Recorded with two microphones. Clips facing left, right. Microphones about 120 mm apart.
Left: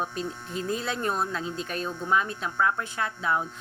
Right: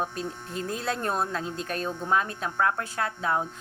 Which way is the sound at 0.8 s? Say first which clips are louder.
Even; 40° right (ahead or behind).